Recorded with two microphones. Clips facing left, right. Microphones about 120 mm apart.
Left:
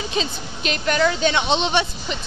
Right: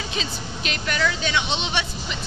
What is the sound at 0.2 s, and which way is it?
A woman's voice, 30° left (ahead or behind).